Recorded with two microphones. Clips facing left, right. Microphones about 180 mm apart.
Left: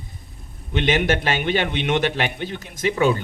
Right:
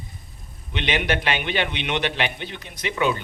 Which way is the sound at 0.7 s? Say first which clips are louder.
Left 4 dB; 45° left (ahead or behind).